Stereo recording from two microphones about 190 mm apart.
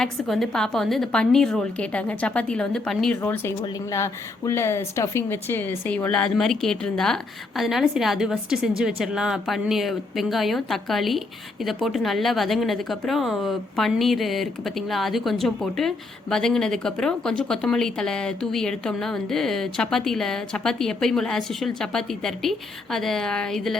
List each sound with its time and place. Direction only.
0.0 s a woman's voice: centre (ahead or behind)